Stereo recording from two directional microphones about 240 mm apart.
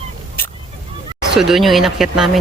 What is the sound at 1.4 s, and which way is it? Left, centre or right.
Speech, centre.